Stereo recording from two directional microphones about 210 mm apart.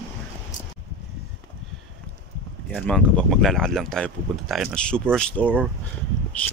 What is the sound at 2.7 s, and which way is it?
Speech, 5° left (ahead or behind).